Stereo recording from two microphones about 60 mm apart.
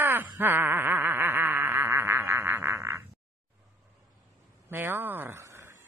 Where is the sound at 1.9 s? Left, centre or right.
Right.